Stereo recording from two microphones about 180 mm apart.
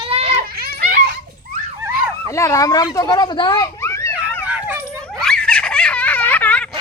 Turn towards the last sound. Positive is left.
turn(degrees=10)  # may be behind; listen again after turning